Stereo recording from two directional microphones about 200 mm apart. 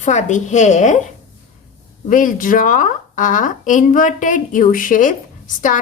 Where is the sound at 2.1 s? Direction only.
40° left (ahead or behind).